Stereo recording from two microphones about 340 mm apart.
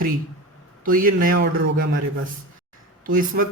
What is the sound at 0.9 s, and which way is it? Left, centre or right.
Speech, right.